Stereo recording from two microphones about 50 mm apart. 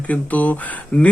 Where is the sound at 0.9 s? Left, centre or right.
Centre.